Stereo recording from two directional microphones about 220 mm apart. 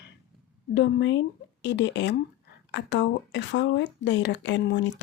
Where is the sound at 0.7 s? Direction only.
55° left (ahead or behind).